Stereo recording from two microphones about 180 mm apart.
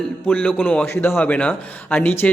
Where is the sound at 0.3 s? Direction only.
5° left (ahead or behind).